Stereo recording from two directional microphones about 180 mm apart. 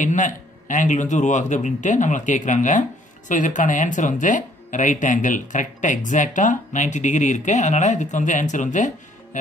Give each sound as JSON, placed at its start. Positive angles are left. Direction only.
{"t": 0.0, "sound": "speech", "side_deg": 45}